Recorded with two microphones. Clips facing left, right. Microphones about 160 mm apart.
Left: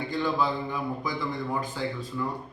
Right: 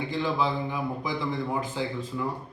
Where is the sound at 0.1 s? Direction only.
20° right (ahead or behind).